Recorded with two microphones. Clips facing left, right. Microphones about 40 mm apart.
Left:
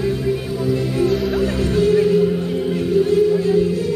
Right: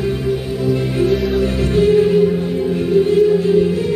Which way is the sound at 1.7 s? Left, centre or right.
Right.